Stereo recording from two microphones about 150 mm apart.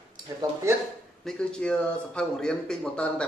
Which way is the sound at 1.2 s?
5° left (ahead or behind).